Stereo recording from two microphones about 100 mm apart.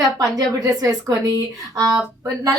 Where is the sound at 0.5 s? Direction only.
40° right (ahead or behind).